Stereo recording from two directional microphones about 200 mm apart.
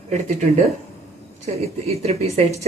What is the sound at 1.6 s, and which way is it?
A woman's voice, 30° right (ahead or behind).